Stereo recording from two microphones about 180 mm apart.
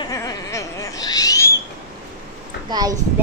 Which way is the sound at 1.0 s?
20° left (ahead or behind).